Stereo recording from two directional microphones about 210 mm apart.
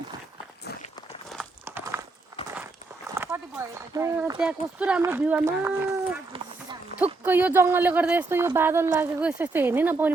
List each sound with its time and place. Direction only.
1.3 s a sound: 5° right (ahead or behind)
3.9 s speech: 15° right (ahead or behind)
4.4 s speech: 5° right (ahead or behind)
7.0 s speech: 10° right (ahead or behind)